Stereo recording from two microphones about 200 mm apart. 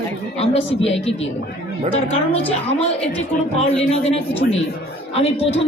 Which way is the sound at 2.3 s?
30° left (ahead or behind).